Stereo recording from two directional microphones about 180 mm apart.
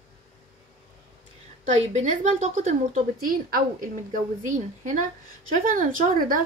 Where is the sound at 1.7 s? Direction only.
40° right (ahead or behind).